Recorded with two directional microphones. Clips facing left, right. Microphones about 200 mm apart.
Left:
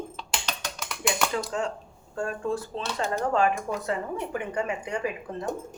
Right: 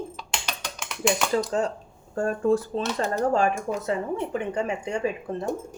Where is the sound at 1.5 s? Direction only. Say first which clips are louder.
Right 4 dB; 35° right (ahead or behind).